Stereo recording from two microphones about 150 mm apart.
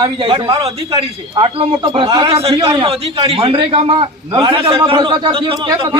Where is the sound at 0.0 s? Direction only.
30° right (ahead or behind).